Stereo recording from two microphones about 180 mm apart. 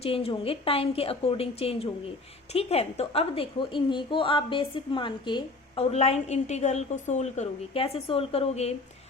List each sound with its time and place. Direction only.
0.0 s a woman's voice: 30° left (ahead or behind)